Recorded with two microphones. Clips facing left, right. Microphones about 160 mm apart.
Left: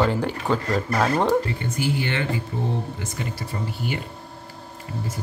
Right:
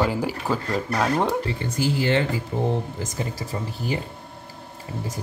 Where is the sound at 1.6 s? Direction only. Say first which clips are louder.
Right 1 dB; 35° right (ahead or behind).